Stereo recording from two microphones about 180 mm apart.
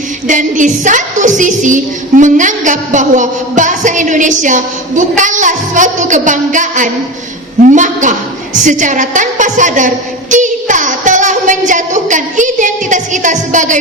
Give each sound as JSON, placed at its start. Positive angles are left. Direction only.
{"t": 0.3, "sound": "a woman's voice", "side_deg": -45}